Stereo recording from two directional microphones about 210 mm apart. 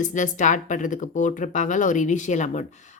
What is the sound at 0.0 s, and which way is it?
Speech, 35° left (ahead or behind).